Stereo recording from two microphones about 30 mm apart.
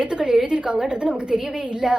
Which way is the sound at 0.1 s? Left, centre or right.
Right.